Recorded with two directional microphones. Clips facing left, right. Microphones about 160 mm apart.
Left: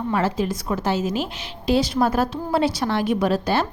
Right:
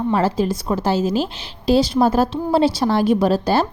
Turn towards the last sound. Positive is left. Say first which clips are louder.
# right 4 dB
turn(degrees=-35)  # may be behind; listen again after turning